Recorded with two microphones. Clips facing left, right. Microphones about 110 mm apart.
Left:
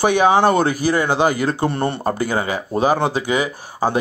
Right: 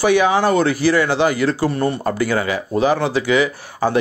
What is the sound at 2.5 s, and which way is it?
Speech, 40° left (ahead or behind).